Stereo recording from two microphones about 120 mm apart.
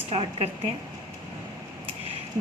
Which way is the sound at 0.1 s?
50° right (ahead or behind).